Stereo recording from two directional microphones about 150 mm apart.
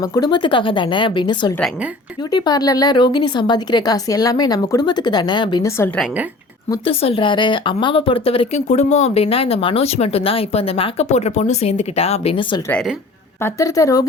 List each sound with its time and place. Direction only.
0.0 s speech: 25° left (ahead or behind)
6.8 s speech: 40° left (ahead or behind)
13.4 s speech: 20° left (ahead or behind)